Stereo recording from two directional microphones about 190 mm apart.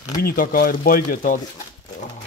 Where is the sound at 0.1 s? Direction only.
50° left (ahead or behind).